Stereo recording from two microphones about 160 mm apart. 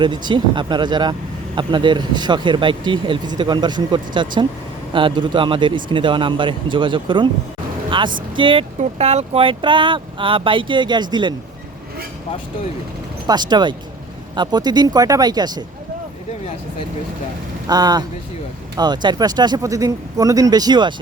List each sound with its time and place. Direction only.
0.3 s speech: 30° right (ahead or behind)
8.8 s speech: 40° right (ahead or behind)
13.2 s speech: 25° right (ahead or behind)
17.7 s speech: 25° right (ahead or behind)